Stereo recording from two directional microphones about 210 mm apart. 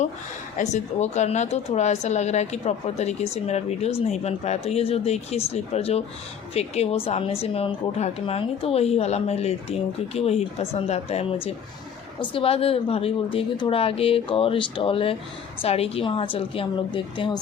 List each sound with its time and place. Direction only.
0.5 s a woman's voice: 35° left (ahead or behind)